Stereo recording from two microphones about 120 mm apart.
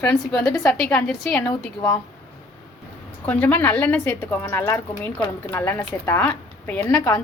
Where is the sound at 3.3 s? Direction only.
10° left (ahead or behind).